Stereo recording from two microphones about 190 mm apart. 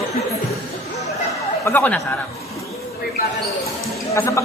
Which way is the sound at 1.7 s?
10° left (ahead or behind).